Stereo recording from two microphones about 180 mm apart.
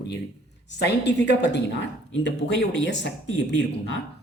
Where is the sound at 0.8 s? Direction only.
70° left (ahead or behind).